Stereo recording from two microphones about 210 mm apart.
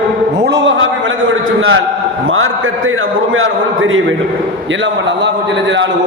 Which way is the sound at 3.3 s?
70° right (ahead or behind).